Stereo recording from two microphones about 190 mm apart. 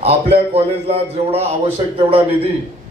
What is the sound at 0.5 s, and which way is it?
A man's voice, 35° right (ahead or behind).